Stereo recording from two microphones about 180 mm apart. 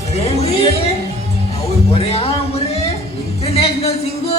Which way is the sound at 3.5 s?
35° left (ahead or behind).